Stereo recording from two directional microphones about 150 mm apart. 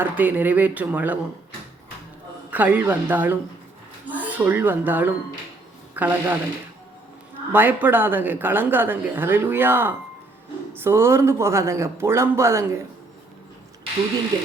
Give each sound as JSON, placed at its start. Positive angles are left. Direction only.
{"t": 0.0, "sound": "a woman's voice", "side_deg": -10}
{"t": 2.5, "sound": "a woman's voice", "side_deg": -10}
{"t": 7.5, "sound": "a woman's voice", "side_deg": -10}
{"t": 14.3, "sound": "speech", "side_deg": -20}